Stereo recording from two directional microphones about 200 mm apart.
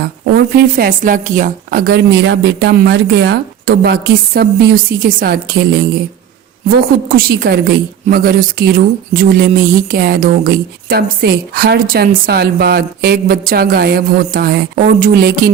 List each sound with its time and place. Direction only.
0.5 s speech: 45° right (ahead or behind)